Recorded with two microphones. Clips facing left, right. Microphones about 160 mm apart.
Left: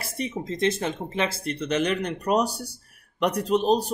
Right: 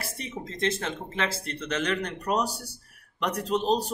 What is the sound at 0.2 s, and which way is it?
Speech, 15° left (ahead or behind).